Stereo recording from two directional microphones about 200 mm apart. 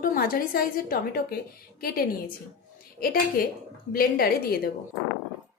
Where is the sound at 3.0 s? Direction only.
50° left (ahead or behind).